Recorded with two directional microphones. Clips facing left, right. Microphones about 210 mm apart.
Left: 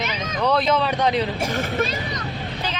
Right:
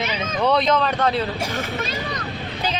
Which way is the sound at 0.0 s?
Centre (ahead or behind).